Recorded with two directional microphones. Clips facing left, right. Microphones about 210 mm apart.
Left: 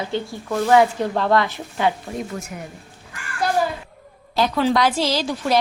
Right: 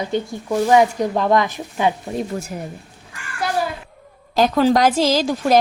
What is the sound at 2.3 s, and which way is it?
Speech, 35° right (ahead or behind).